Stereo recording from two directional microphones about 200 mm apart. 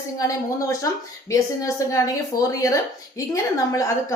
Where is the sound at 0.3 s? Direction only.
15° left (ahead or behind).